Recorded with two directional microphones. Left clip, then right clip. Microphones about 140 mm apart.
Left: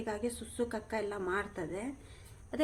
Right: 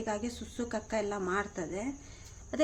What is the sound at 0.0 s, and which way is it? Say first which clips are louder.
A woman's voice: right 1 dB; 35° right (ahead or behind).